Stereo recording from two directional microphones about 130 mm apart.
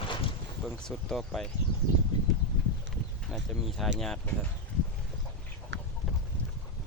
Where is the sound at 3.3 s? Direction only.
Centre (ahead or behind).